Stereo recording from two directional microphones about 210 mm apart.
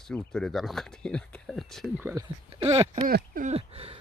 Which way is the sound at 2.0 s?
20° right (ahead or behind).